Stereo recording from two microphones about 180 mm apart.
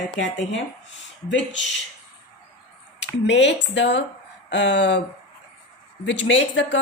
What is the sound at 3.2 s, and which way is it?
A woman's voice, 80° left.